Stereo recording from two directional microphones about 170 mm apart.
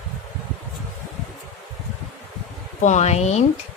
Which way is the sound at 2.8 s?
45° left (ahead or behind).